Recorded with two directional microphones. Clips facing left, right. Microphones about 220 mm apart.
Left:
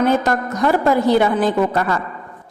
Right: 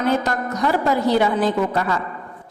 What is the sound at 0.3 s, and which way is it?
A woman's voice, 50° left (ahead or behind).